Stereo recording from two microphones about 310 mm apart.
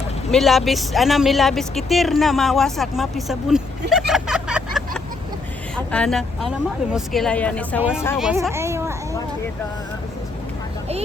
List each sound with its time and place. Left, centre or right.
0.3 s a woman's voice: centre